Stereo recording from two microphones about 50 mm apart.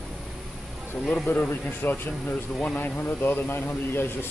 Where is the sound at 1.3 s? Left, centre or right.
Left.